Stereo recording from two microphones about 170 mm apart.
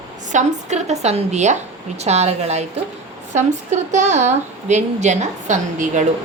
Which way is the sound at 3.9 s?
45° right (ahead or behind).